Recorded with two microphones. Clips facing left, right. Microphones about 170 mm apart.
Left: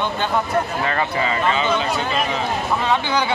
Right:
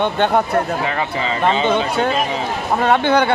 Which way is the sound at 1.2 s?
25° right (ahead or behind).